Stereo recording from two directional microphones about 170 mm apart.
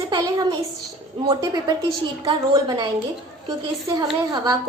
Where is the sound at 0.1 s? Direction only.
20° right (ahead or behind).